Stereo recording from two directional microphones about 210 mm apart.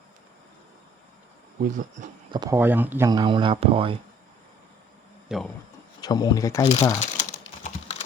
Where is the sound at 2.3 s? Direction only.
15° right (ahead or behind).